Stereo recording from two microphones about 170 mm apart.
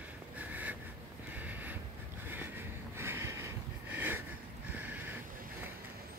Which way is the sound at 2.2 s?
10° right (ahead or behind).